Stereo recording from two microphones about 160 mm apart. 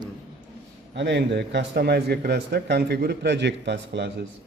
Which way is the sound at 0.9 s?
90° right.